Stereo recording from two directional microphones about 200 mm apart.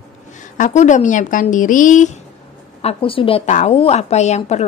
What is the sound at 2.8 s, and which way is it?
A woman's voice, 25° left (ahead or behind).